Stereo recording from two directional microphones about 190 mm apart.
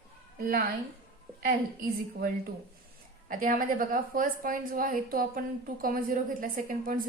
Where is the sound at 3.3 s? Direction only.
45° right (ahead or behind).